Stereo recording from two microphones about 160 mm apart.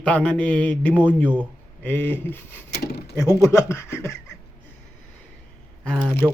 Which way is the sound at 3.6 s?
15° left (ahead or behind).